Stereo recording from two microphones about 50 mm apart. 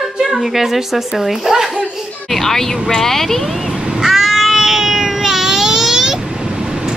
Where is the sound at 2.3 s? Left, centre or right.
Centre.